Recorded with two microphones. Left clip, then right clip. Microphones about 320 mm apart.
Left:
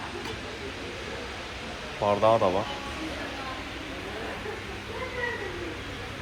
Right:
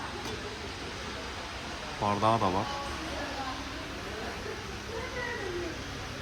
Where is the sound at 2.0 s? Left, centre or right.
Centre.